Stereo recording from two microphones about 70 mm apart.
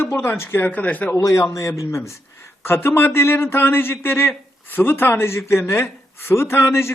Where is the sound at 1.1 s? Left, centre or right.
Left.